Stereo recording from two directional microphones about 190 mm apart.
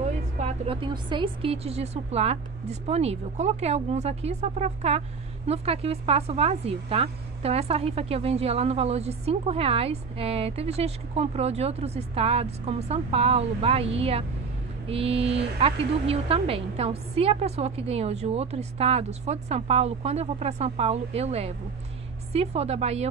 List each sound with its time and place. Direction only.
0.4 s a woman's voice: 30° right (ahead or behind)